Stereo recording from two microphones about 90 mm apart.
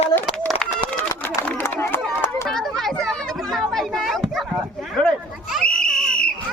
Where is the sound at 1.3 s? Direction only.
25° left (ahead or behind).